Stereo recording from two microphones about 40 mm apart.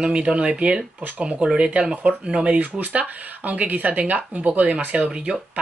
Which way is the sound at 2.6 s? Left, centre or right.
Right.